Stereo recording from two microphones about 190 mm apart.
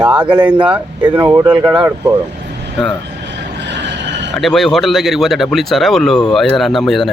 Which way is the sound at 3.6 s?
70° right (ahead or behind).